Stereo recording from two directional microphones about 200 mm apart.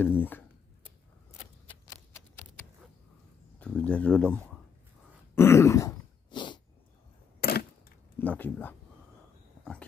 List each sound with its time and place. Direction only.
0.2 s a sound: 10° left (ahead or behind)
1.7 s shuffling cards: 15° left (ahead or behind)
3.5 s speech: 5° left (ahead or behind)
5.3 s throat clearing: 15° left (ahead or behind)
7.3 s a sound: 50° left (ahead or behind)
8.2 s speech: 10° left (ahead or behind)